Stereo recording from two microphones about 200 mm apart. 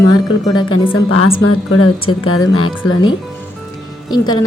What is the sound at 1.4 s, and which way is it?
Speech, 90° left.